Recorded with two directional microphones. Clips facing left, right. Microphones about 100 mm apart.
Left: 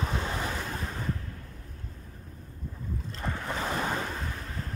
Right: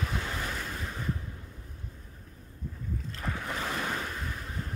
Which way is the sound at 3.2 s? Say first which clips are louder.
Left 2 dB; centre (ahead or behind).